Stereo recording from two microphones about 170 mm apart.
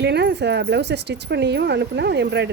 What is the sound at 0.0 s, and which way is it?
Speech, 80° right.